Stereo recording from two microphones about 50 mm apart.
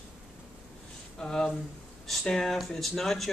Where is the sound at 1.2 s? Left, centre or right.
Centre.